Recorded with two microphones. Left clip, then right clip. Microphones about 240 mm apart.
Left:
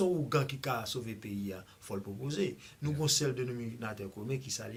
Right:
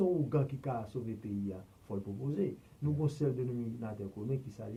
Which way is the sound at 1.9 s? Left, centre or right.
Left.